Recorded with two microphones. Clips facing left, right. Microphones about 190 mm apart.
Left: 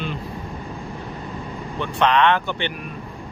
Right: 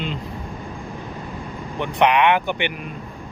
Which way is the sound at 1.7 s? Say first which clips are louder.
Right 1 dB; 15° right (ahead or behind).